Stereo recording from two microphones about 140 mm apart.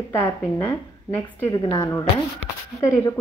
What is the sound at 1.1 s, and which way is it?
A woman's voice, 20° left (ahead or behind).